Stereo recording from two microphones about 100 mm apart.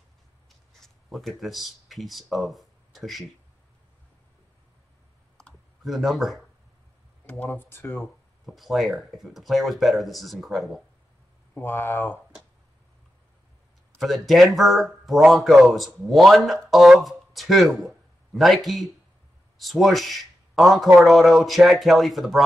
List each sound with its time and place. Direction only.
0.7 s speech: centre (ahead or behind)
5.4 s clicking: centre (ahead or behind)
7.4 s speech: 20° left (ahead or behind)
8.5 s speech: centre (ahead or behind)
11.5 s speech: 25° left (ahead or behind)
13.9 s speech: centre (ahead or behind)